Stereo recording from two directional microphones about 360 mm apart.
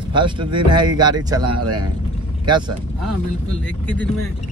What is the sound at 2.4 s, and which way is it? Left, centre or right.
Speech, centre.